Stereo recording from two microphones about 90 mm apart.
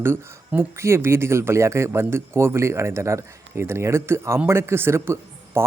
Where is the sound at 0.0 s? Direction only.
25° right (ahead or behind).